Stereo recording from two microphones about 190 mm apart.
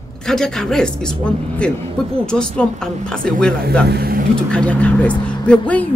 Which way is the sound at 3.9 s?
55° right (ahead or behind).